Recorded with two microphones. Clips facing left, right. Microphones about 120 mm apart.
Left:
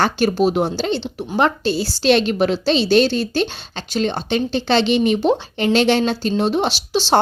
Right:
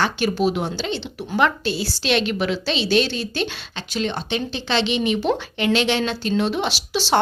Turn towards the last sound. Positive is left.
turn(degrees=35)  # may be behind; listen again after turning